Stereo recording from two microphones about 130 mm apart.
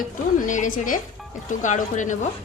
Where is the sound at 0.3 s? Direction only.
80° left.